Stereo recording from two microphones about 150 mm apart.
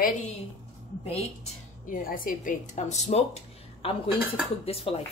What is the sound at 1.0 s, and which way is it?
Speech, 45° left (ahead or behind).